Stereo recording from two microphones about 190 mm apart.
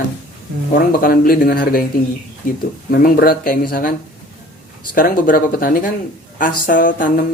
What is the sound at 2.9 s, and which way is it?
Speech, 50° left (ahead or behind).